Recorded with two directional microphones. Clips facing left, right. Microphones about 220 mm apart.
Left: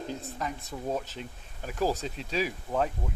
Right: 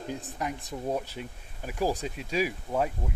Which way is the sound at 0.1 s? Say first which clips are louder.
Right 1 dB; 15° right (ahead or behind).